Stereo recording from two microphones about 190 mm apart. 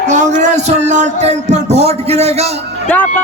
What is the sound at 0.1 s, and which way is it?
Speech, 40° right (ahead or behind).